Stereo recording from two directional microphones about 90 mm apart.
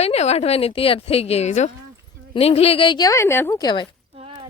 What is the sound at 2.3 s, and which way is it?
Speech, 90° left.